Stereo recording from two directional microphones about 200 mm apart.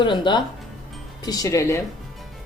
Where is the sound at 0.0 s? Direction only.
25° left (ahead or behind).